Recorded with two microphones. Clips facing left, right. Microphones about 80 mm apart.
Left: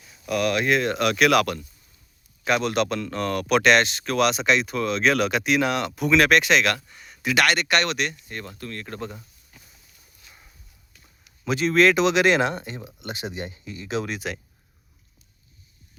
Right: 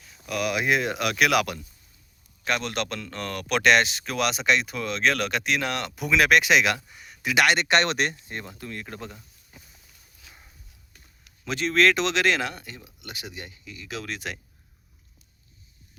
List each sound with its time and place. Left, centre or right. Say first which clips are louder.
0.3 s speech: left 3 dB; centre
2.5 s speech: left 6 dB; centre
7.3 s speech: even; centre; by 8.2 s right
8.3 s speech: left 1 dB; centre
9.5 s a sound: right 2 dB; centre
11.4 s speech: left 3 dB; centre; by 14.1 s left
14.1 s speech: left 3 dB; centre